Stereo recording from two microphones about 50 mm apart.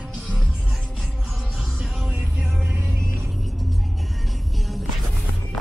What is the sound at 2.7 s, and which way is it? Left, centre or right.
Music, right.